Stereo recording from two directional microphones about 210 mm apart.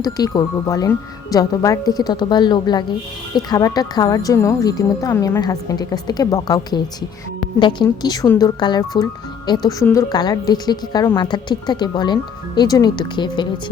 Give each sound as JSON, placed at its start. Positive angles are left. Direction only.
{"t": 0.0, "sound": "a woman's voice", "side_deg": 20}